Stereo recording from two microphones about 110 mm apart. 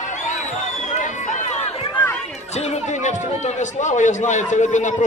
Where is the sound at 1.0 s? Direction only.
90° left.